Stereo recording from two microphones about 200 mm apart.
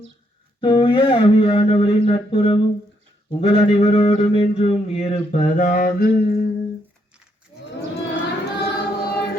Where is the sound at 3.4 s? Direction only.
30° left (ahead or behind).